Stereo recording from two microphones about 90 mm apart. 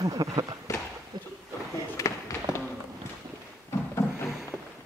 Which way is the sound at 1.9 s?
35° left (ahead or behind).